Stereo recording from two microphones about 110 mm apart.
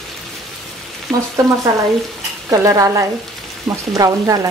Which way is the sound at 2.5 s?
25° right (ahead or behind).